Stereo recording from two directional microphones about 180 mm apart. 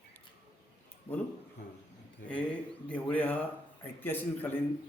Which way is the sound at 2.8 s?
10° left (ahead or behind).